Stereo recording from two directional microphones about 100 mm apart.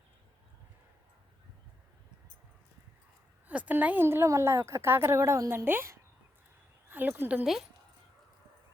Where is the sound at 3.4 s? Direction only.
15° right (ahead or behind).